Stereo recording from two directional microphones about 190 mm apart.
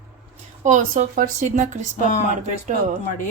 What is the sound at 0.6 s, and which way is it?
Speech, 40° right (ahead or behind).